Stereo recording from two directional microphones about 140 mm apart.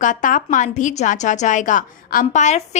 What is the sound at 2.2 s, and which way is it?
Speech, 55° left (ahead or behind).